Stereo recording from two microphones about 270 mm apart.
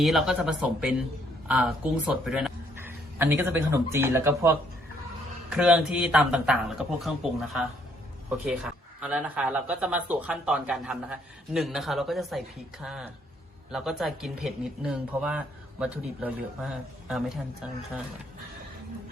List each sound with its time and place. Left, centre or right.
0.0 s a man's voice: centre